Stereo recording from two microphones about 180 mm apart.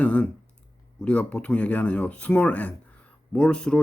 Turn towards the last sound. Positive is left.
turn(degrees=5)  # may be behind; listen again after turning